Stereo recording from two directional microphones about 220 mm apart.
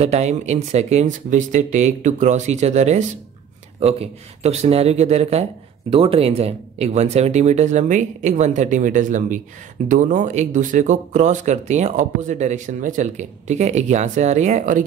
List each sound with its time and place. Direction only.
0.0 s speech: 30° right (ahead or behind)